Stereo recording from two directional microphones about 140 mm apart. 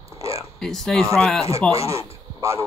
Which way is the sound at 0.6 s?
5° left (ahead or behind).